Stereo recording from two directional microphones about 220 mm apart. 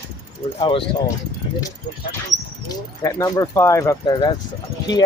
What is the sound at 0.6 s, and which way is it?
Speech, 20° left (ahead or behind).